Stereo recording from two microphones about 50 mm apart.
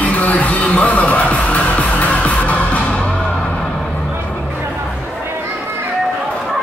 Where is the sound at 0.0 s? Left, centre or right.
Left.